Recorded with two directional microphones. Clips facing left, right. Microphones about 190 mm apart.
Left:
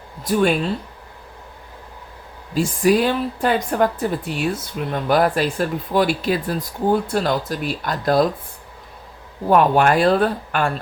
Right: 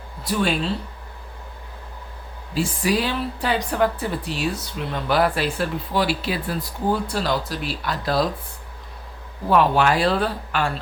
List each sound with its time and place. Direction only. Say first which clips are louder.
0.3 s a woman's voice: left 5 dB; 45° left (ahead or behind)
2.6 s a woman's voice: left 5 dB; 50° left (ahead or behind)
9.5 s a woman's voice: left 3 dB; 50° left (ahead or behind)